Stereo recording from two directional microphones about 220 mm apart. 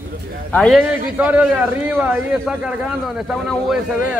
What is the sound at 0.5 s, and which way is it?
A man's voice, centre (ahead or behind).